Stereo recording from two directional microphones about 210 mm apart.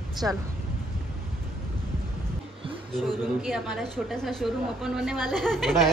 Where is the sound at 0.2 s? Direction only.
10° right (ahead or behind).